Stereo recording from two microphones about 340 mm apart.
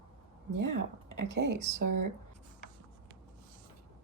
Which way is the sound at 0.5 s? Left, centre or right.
Right.